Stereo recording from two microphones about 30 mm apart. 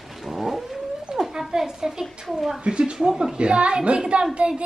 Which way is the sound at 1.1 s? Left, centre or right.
Centre.